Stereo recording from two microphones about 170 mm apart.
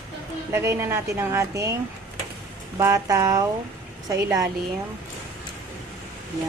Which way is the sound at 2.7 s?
20° right (ahead or behind).